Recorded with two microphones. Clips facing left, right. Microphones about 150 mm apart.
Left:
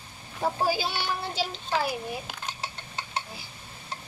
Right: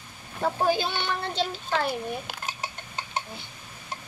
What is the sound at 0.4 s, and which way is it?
Speech, 5° left (ahead or behind).